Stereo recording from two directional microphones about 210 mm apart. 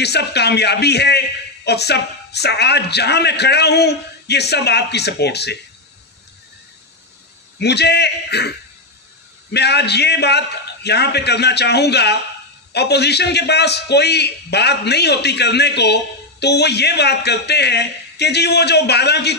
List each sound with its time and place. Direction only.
0.0 s a man's voice: 50° left (ahead or behind)
7.5 s a man's voice: 50° left (ahead or behind)